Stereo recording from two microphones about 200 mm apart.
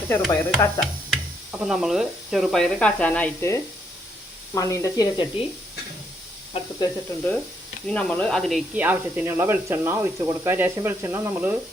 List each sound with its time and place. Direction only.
0.3 s stir: 5° left (ahead or behind)
1.5 s speech: centre (ahead or behind); by 5.3 s 20° left (ahead or behind)
6.5 s speech: 20° left (ahead or behind)
7.9 s speech: 5° left (ahead or behind); by 11.5 s 10° right (ahead or behind)